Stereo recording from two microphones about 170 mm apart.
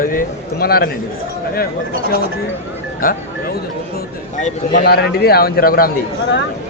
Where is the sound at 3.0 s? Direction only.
55° left (ahead or behind).